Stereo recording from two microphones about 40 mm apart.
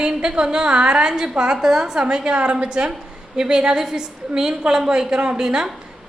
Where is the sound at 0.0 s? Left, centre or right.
Right.